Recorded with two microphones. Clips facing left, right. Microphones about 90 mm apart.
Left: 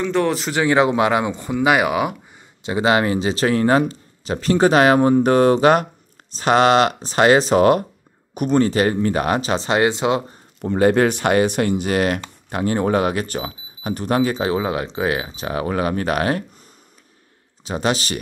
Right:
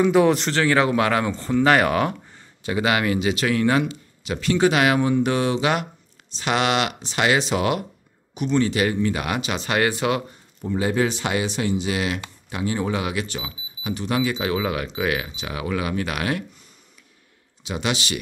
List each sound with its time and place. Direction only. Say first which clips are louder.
0.0 s speech: right 3 dB; 5° right (ahead or behind)
0.5 s speech: left 3 dB; 15° left (ahead or behind)
2.6 s speech: left 4 dB; 25° left (ahead or behind)
10.6 s speech: left 6 dB; 60° left (ahead or behind); by 16.4 s 40° left (ahead or behind)
17.6 s speech: left 4 dB; 40° left (ahead or behind)